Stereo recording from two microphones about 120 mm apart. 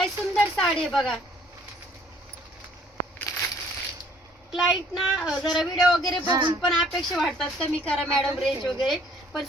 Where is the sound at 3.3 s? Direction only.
30° left (ahead or behind).